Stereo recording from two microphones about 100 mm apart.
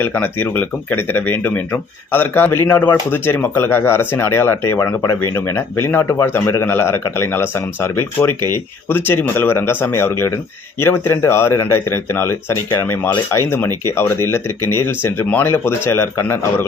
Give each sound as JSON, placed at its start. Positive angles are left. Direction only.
{"t": 0.0, "sound": "speech", "side_deg": 20}